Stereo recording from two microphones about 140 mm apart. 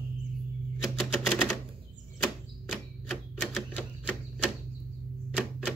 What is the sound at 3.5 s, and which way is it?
Typewriter, 5° right (ahead or behind).